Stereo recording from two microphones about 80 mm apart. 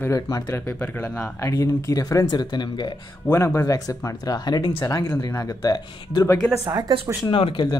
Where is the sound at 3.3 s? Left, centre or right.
Left.